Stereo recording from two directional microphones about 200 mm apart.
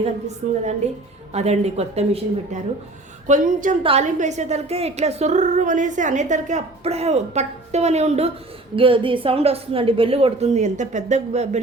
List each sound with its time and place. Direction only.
0.0 s a woman's voice: 35° right (ahead or behind)